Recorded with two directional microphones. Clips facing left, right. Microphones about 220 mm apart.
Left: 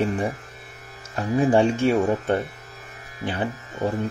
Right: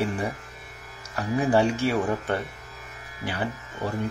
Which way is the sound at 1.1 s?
25° left (ahead or behind).